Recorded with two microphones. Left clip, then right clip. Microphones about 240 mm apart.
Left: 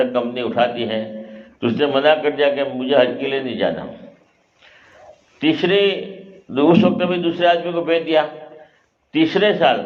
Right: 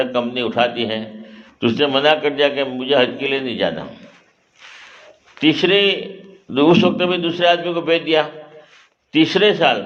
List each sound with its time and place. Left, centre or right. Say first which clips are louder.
0.0 s a man's voice: even; right
5.4 s a man's voice: right 2 dB; right